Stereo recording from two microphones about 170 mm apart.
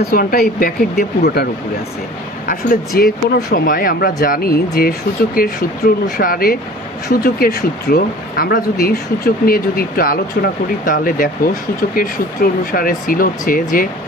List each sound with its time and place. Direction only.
0.1 s speech: 60° left (ahead or behind)